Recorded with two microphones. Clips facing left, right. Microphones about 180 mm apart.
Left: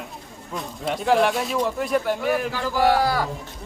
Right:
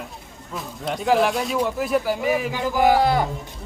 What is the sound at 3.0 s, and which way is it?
Speech, 20° right (ahead or behind).